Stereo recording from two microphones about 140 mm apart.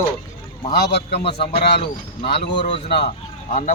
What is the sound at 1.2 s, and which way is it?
Speech, 40° left (ahead or behind).